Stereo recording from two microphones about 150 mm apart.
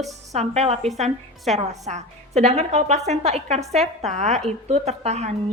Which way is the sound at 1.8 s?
50° right (ahead or behind).